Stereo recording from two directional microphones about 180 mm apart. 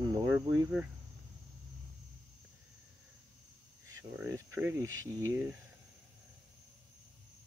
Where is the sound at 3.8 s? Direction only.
15° right (ahead or behind).